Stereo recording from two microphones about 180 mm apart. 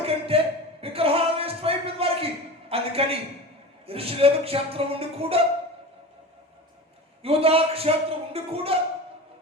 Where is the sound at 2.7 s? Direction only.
30° right (ahead or behind).